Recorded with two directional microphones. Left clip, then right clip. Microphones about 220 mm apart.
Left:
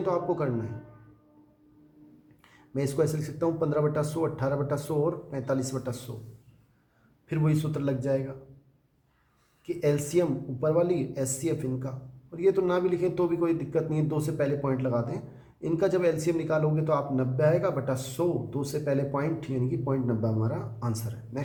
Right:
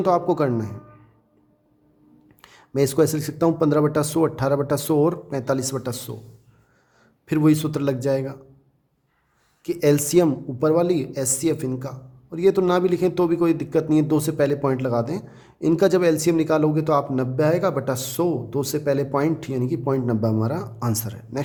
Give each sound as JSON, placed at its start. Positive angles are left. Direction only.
{"t": 0.0, "sound": "a woman's voice", "side_deg": -50}
{"t": 2.4, "sound": "a woman's voice", "side_deg": -50}
{"t": 7.3, "sound": "a woman's voice", "side_deg": -50}
{"t": 9.6, "sound": "a woman's voice", "side_deg": -50}